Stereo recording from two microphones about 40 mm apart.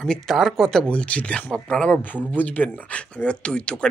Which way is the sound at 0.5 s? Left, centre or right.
Centre.